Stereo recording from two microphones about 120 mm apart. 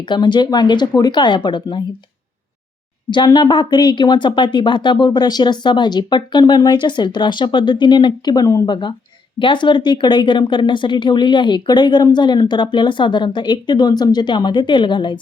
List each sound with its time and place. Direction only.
0.0 s speech: 40° left (ahead or behind)
3.1 s speech: 35° left (ahead or behind)